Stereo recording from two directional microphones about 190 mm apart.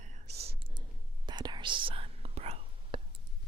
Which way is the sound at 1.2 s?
25° right (ahead or behind).